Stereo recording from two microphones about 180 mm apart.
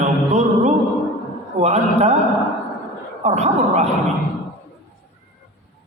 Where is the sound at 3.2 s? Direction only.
35° right (ahead or behind).